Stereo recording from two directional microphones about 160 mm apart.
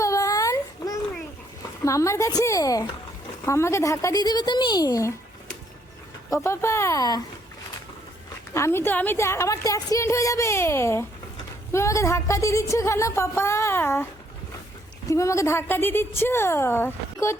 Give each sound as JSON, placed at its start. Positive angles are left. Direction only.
{"t": 0.0, "sound": "baby cry", "side_deg": 20}
{"t": 1.8, "sound": "speech", "side_deg": 20}
{"t": 8.5, "sound": "a woman's voice", "side_deg": 15}